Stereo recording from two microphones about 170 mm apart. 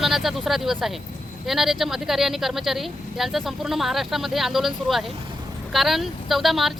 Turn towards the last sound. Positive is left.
turn(degrees=0)  # may be behind; listen again after turning